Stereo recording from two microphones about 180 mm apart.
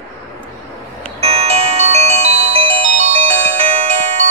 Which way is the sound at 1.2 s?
35° right (ahead or behind).